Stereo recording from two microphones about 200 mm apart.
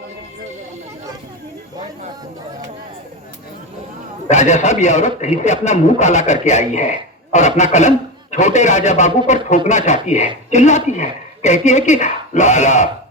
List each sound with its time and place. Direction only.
4.3 s a man's voice: 35° left (ahead or behind)